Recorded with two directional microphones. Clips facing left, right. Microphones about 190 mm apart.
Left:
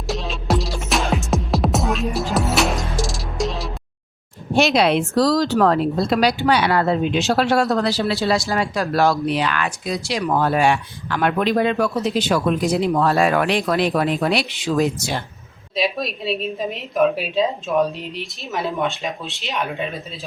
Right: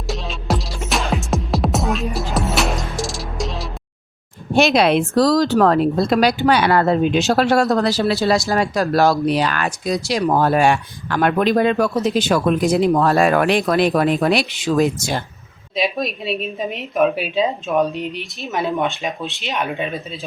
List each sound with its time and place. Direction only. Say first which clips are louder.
0.1 s music: left 1 dB; centre (ahead or behind)
4.5 s a woman's voice: right 2 dB; 55° right (ahead or behind)
15.7 s a woman's voice: right 1 dB; centre (ahead or behind)